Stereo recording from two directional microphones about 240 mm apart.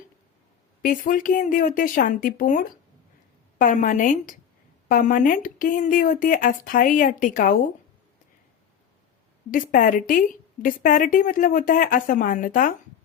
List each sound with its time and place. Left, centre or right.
0.8 s a woman's voice: left
9.5 s a woman's voice: left